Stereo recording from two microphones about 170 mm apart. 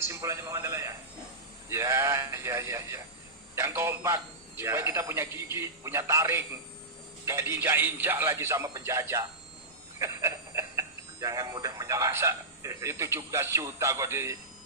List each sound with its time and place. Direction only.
0.0 s a man's voice: 15° right (ahead or behind)